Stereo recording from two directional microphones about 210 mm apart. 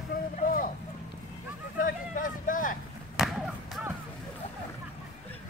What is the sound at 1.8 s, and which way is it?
Vehicle, 40° left (ahead or behind).